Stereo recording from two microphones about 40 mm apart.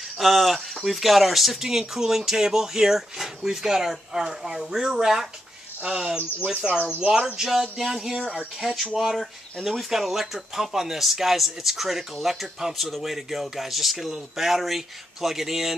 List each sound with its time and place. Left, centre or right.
0.2 s speech: centre
6.6 s speech: right
7.3 s speech: centre